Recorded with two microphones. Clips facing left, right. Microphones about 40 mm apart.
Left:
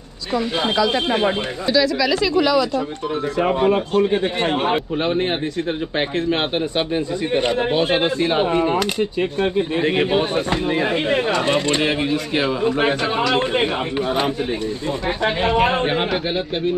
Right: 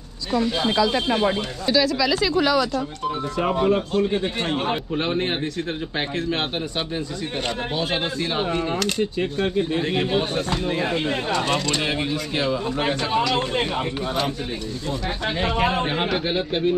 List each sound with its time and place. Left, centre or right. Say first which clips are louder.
2.3 s a man's voice: left 4 dB; centre
3.5 s speech: left 2 dB; left
4.9 s a man's voice: left 3 dB; centre
15.2 s speech: left 5 dB; left
16.0 s a man's voice: left 2 dB; centre